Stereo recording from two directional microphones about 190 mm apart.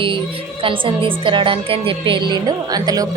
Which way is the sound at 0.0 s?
25° right (ahead or behind).